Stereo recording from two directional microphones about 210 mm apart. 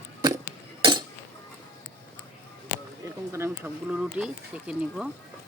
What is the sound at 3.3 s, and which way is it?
Speech, 10° right (ahead or behind).